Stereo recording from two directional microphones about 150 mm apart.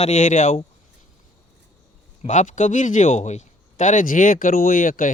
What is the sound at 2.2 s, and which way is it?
A man's voice, 55° left (ahead or behind).